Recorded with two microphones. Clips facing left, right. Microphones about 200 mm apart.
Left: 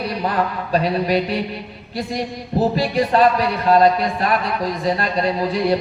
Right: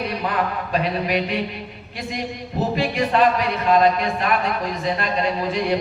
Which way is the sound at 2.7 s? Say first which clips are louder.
Right 1 dB; 35° left (ahead or behind).